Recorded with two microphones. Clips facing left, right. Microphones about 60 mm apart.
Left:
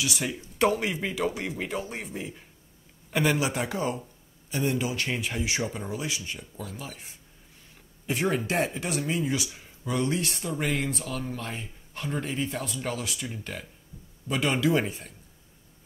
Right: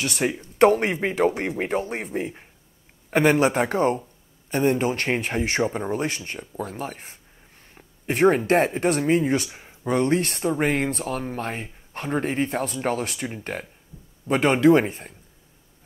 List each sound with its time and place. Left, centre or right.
0.0 s speech: right
7.7 s a sound: right
8.5 s speech: right